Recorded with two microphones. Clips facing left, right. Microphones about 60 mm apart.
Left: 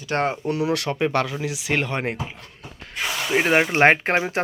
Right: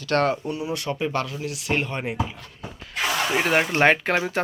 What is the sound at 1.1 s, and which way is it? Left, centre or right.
Speech, left.